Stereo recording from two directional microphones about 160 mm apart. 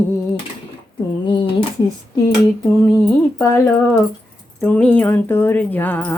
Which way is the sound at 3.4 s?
15° left (ahead or behind).